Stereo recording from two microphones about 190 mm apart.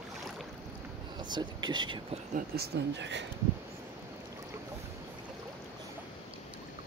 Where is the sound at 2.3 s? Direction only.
55° right (ahead or behind).